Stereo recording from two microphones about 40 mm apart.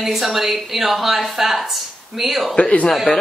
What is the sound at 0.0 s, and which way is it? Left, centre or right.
A woman's voice, centre.